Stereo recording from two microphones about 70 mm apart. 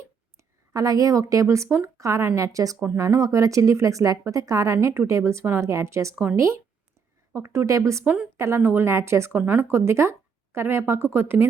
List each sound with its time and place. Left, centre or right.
0.3 s a woman's voice: right
8.0 s a woman's voice: centre
8.4 s speech: right